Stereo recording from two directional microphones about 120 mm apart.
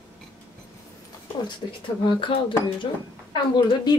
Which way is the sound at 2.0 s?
45° left (ahead or behind).